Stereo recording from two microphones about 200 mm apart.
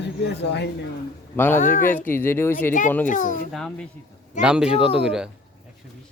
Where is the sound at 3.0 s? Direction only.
40° left (ahead or behind).